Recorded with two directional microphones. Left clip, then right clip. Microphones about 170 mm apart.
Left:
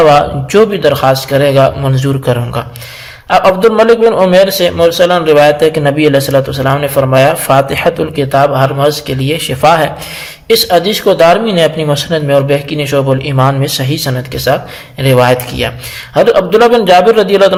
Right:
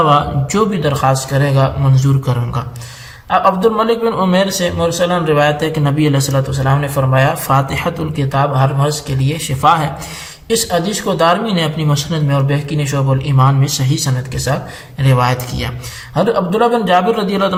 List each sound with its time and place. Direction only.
0.1 s a man's voice: 25° left (ahead or behind)